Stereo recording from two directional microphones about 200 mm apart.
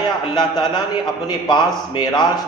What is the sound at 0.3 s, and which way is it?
A man's voice, 20° left (ahead or behind).